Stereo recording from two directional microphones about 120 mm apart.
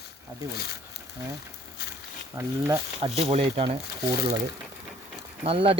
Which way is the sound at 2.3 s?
25° right (ahead or behind).